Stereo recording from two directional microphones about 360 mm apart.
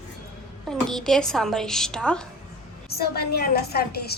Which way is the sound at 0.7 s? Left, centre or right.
Centre.